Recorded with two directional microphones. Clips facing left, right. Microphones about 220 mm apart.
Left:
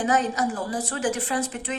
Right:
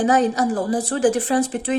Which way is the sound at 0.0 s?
35° right (ahead or behind).